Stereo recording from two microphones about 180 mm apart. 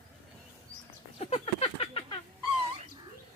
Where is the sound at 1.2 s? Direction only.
35° left (ahead or behind).